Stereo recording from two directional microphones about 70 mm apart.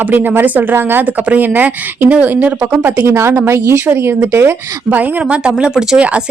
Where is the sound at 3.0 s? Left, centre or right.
Right.